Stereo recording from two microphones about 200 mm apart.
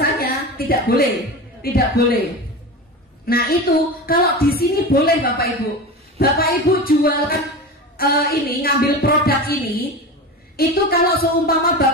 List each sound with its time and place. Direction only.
0.0 s a sound: 50° left (ahead or behind)
1.6 s a woman's voice: 50° left (ahead or behind)
3.3 s a woman's voice: 50° left (ahead or behind)